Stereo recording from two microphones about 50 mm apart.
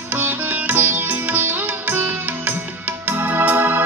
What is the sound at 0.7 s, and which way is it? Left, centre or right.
Music, right.